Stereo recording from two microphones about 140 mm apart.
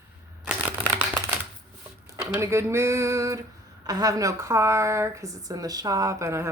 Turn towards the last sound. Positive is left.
turn(degrees=-20)  # may be behind; listen again after turning